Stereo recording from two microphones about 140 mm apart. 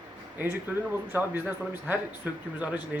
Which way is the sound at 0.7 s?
10° right (ahead or behind).